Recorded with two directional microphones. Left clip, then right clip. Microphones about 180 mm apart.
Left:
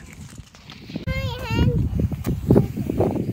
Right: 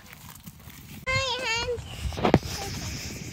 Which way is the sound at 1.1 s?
40° left (ahead or behind).